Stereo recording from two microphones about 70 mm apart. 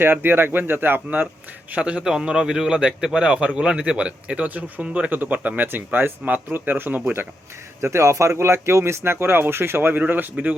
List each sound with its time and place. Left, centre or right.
0.0 s speech: right
1.7 s a man's voice: centre; by 7.3 s right
7.8 s speech: right